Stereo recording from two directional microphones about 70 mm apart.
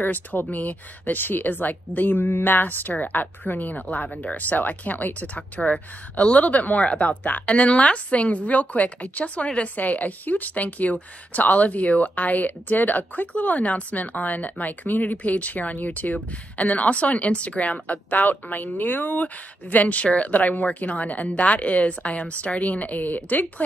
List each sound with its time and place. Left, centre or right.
0.0 s speech: left